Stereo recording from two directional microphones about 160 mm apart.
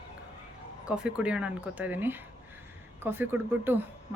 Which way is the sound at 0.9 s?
5° right (ahead or behind).